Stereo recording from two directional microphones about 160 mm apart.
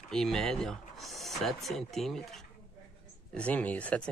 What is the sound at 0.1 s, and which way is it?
Speech, 5° left (ahead or behind).